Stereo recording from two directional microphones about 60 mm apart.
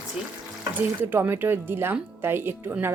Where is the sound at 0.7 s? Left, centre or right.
Right.